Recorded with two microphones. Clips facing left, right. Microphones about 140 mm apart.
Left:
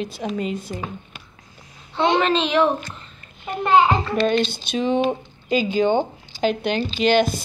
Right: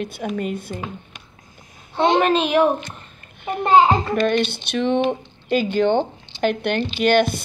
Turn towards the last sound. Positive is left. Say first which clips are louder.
# right 1 dB
turn(degrees=-55)  # may be behind; listen again after turning